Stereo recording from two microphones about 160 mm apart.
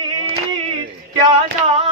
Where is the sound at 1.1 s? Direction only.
30° right (ahead or behind).